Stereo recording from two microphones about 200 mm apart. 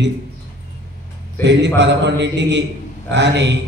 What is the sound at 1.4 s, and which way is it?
A man's voice, 60° right (ahead or behind).